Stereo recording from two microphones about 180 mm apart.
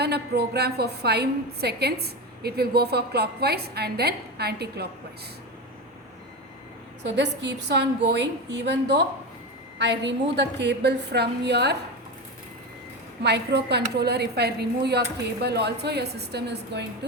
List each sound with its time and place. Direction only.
0.0 s a woman's voice: 65° right (ahead or behind)
7.0 s a woman's voice: 70° right (ahead or behind)
13.2 s a woman's voice: 70° right (ahead or behind)